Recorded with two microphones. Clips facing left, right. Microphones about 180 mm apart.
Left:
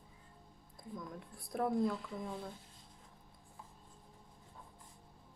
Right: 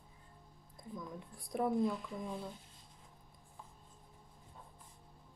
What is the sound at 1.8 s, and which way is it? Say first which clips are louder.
Speech: even; 15° right (ahead or behind).